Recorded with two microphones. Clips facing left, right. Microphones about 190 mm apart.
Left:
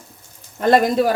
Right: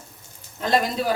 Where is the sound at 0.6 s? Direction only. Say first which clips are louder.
Left 7 dB; 55° left (ahead or behind).